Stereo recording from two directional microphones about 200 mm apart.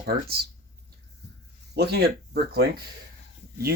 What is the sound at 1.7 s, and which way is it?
Speech, 55° right (ahead or behind).